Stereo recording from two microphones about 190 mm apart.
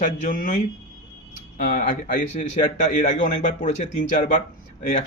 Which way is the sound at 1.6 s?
45° left (ahead or behind).